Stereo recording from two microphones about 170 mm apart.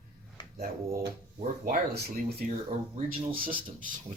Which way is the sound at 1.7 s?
65° right (ahead or behind).